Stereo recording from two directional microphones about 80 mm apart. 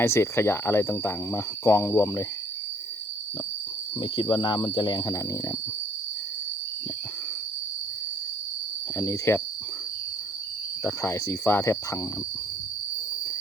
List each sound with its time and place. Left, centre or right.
0.0 s speech: left
4.0 s insect: left
9.0 s speech: left
11.0 s speech: left